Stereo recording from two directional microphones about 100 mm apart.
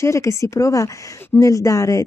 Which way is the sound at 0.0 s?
30° left (ahead or behind).